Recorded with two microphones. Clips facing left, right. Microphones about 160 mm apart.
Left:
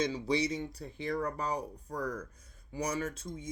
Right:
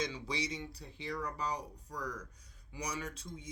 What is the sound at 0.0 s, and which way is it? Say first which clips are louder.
Speech: left 7 dB; 45° left (ahead or behind).